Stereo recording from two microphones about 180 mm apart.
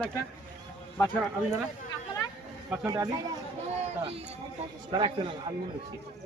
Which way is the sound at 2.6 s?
15° right (ahead or behind).